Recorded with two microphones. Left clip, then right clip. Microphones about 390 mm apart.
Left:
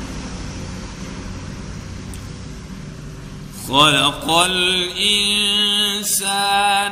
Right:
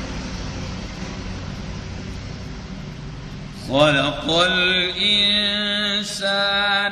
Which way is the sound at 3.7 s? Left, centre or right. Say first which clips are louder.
Left 3 dB; centre.